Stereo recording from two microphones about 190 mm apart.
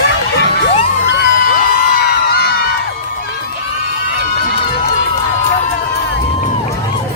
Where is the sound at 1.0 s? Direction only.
60° left (ahead or behind).